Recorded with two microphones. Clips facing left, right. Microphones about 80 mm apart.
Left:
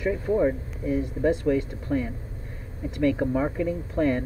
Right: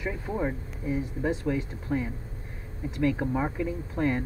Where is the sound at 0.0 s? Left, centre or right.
Centre.